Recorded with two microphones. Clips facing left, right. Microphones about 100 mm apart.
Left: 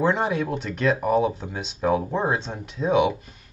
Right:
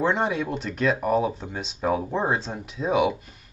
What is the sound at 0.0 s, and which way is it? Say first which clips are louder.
Speech: left 1 dB; centre (ahead or behind).